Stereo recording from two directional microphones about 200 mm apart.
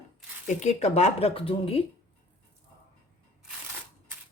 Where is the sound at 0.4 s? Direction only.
35° left (ahead or behind).